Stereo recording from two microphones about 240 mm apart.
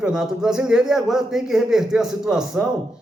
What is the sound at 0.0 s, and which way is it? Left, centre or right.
A man's voice, centre.